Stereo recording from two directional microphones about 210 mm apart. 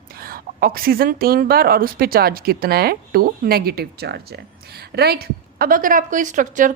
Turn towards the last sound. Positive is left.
turn(degrees=-40)  # may be behind; listen again after turning